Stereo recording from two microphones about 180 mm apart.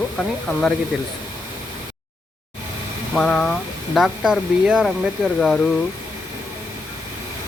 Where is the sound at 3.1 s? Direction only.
5° left (ahead or behind).